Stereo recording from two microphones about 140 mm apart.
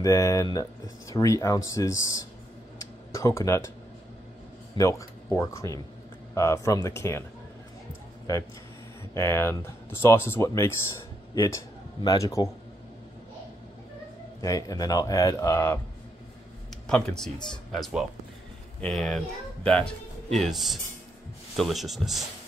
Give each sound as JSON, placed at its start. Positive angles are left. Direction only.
{"t": 0.0, "sound": "speech", "side_deg": 25}
{"t": 3.1, "sound": "speech", "side_deg": 20}
{"t": 4.7, "sound": "speech", "side_deg": 20}
{"t": 9.1, "sound": "speech", "side_deg": 20}
{"t": 14.4, "sound": "speech", "side_deg": 25}
{"t": 16.8, "sound": "speech", "side_deg": 5}